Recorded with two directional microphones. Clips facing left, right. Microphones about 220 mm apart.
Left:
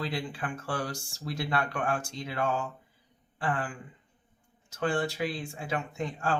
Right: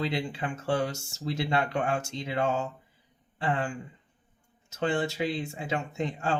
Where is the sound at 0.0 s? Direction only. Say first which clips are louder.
Right 3 dB; 25° right (ahead or behind).